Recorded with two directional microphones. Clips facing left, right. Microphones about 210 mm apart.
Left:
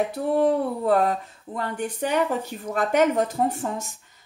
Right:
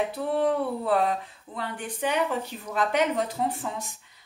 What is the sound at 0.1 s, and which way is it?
Speech, 45° left (ahead or behind).